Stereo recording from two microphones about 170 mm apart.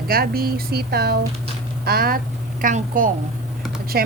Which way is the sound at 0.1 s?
60° right (ahead or behind).